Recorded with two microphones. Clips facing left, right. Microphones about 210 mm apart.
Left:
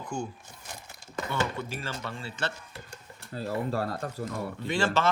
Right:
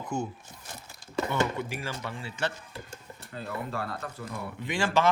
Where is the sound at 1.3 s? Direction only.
15° right (ahead or behind).